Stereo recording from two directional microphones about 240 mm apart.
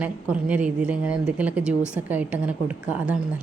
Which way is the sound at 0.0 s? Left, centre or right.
Centre.